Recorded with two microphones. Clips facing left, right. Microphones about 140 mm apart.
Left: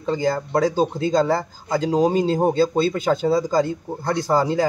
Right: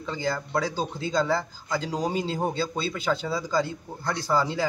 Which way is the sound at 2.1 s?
45° left (ahead or behind).